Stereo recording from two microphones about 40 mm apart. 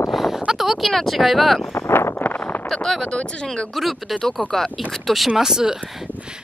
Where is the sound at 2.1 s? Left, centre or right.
Left.